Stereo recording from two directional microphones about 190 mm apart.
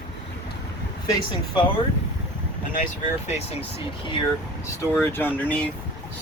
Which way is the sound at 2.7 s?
40° left (ahead or behind).